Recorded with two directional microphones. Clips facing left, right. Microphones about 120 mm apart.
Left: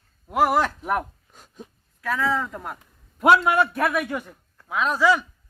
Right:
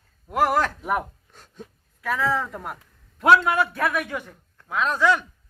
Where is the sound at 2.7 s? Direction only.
10° left (ahead or behind).